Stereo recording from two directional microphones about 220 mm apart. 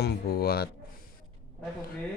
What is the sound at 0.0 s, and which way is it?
Speech, 45° left (ahead or behind).